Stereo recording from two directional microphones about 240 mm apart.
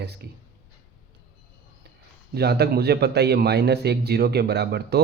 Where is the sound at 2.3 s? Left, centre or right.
Right.